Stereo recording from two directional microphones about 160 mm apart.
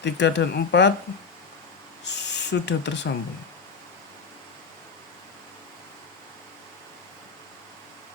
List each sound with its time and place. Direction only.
0.0 s speech: 90° left
2.0 s speech: 90° left